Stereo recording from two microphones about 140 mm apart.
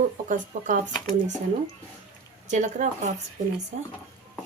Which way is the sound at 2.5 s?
60° right (ahead or behind).